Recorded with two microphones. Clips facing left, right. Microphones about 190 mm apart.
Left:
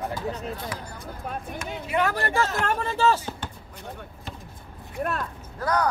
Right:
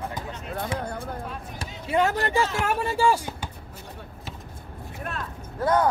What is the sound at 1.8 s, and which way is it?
Speech, 25° right (ahead or behind).